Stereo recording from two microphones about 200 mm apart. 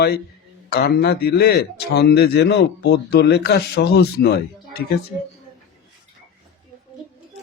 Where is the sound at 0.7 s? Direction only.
50° left (ahead or behind).